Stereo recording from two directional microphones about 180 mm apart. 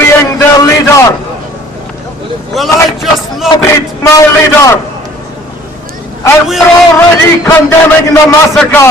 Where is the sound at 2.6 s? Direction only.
Centre (ahead or behind).